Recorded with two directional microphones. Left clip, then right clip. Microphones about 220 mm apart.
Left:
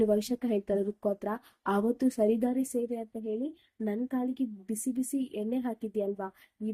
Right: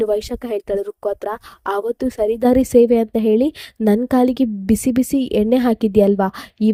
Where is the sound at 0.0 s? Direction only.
40° right (ahead or behind).